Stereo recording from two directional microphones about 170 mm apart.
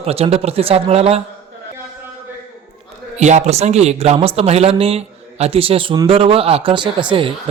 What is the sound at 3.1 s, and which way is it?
Speech, 40° right (ahead or behind).